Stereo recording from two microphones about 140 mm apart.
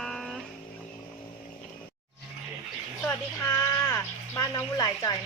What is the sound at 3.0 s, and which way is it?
Speech, 20° left (ahead or behind).